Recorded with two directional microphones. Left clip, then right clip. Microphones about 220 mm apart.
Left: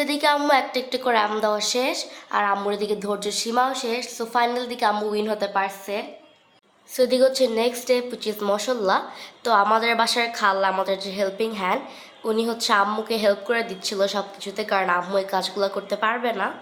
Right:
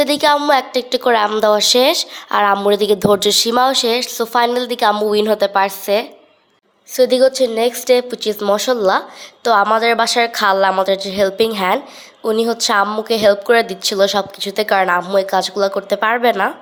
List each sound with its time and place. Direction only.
0.0 s a woman's voice: 30° right (ahead or behind)
6.9 s a woman's voice: 30° right (ahead or behind)